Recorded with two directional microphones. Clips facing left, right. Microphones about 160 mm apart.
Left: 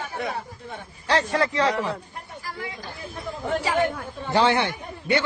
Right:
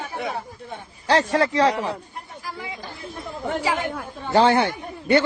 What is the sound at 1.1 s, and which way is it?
Speech, 35° right (ahead or behind).